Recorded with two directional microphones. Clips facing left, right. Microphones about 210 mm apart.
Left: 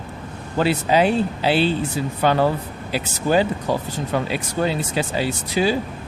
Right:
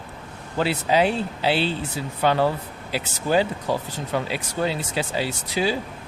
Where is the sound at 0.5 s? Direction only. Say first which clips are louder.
Left 3 dB; 50° left (ahead or behind).